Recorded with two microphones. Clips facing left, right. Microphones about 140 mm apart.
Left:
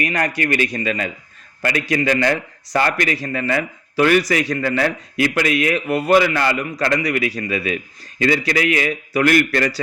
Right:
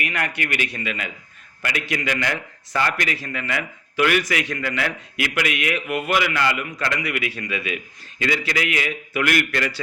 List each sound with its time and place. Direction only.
0.0 s a man's voice: 40° left (ahead or behind)